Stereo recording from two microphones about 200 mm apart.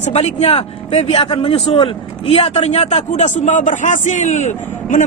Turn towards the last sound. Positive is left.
turn(degrees=35)  # may be behind; listen again after turning